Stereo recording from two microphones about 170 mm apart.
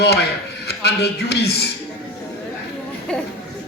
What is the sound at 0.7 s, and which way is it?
A man's voice, 75° left (ahead or behind).